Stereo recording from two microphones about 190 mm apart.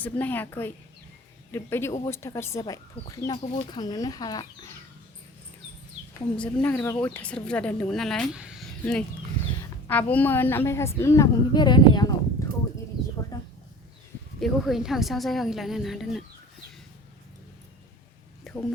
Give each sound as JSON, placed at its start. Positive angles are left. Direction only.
{"t": 0.0, "sound": "speech", "side_deg": 10}
{"t": 6.1, "sound": "speech", "side_deg": 5}
{"t": 8.8, "sound": "speech", "side_deg": 5}
{"t": 12.4, "sound": "a sound", "side_deg": 15}
{"t": 14.3, "sound": "speech", "side_deg": 0}
{"t": 18.5, "sound": "a sound", "side_deg": 0}